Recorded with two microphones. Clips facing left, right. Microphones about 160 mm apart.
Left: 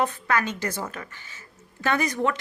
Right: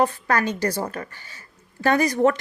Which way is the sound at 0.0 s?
35° right (ahead or behind).